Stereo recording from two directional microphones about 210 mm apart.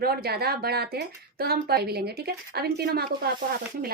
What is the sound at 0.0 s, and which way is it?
Speech, 45° right (ahead or behind).